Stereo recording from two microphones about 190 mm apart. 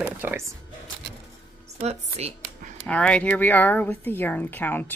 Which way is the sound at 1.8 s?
40° right (ahead or behind).